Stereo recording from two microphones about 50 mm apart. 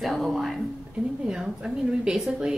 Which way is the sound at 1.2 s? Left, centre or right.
Centre.